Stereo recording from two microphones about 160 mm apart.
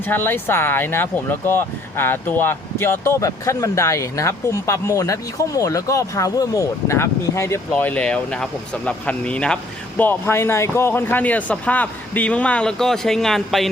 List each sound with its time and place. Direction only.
0.0 s speech: 10° left (ahead or behind)